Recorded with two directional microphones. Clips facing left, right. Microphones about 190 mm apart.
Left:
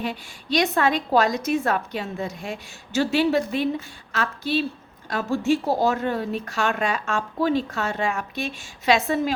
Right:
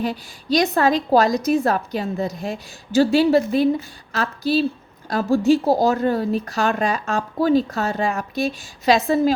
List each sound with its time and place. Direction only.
0.0 s a woman's voice: 40° right (ahead or behind)